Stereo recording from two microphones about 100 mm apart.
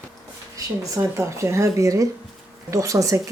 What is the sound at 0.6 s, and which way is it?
Speech, 30° right (ahead or behind).